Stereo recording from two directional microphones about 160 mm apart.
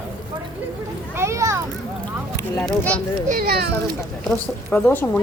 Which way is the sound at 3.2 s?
65° right (ahead or behind).